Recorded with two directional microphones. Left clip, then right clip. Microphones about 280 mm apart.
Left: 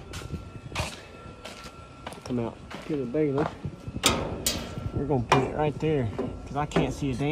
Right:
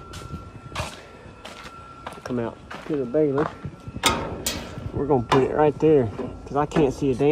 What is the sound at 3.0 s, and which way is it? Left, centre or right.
Speech, centre.